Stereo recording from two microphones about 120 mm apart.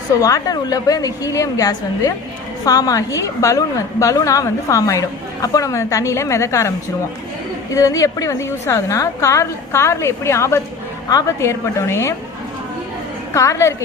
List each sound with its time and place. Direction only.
0.2 s a woman's voice: 30° left (ahead or behind)
13.3 s a woman's voice: 25° left (ahead or behind)